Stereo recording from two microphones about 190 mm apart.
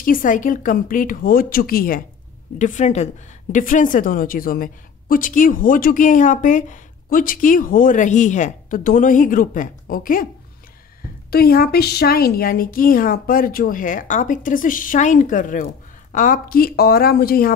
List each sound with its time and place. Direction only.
0.0 s a woman's voice: 45° left (ahead or behind)
11.2 s a woman's voice: 55° left (ahead or behind)